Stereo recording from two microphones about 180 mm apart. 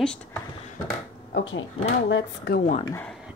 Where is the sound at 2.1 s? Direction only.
70° left (ahead or behind).